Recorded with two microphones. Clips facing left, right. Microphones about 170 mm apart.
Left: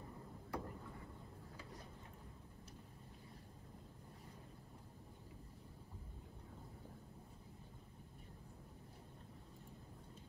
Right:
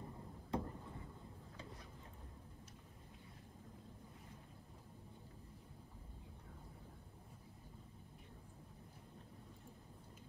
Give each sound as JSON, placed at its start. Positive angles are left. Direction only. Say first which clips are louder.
{"t": 0.5, "sound": "vehicle", "louder": "right 4 dB", "side_deg": -20}